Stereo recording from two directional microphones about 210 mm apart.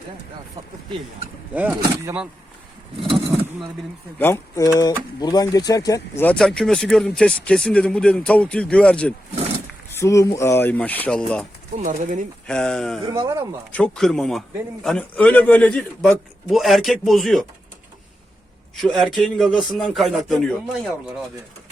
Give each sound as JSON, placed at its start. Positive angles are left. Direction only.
{"t": 1.5, "sound": "speech", "side_deg": -10}
{"t": 4.2, "sound": "speech", "side_deg": 15}
{"t": 11.8, "sound": "speech", "side_deg": -40}
{"t": 12.5, "sound": "speech", "side_deg": 5}
{"t": 13.1, "sound": "speech", "side_deg": -15}
{"t": 13.7, "sound": "speech", "side_deg": 5}
{"t": 18.8, "sound": "speech", "side_deg": 0}